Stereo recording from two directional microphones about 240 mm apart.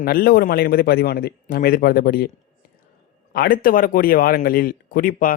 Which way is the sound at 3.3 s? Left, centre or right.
Left.